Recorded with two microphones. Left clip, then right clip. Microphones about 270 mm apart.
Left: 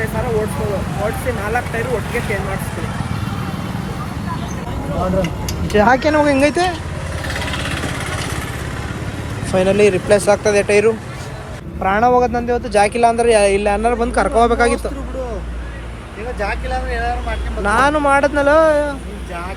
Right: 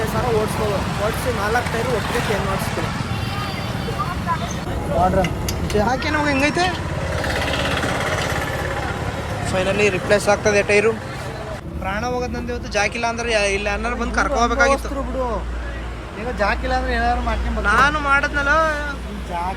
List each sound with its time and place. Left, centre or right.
4.9 s speech: centre
7.3 s vehicle: right
9.5 s speech: centre
16.4 s speech: right
17.7 s speech: centre